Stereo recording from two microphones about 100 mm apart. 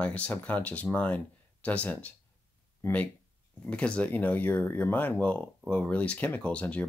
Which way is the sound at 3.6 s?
10° left (ahead or behind).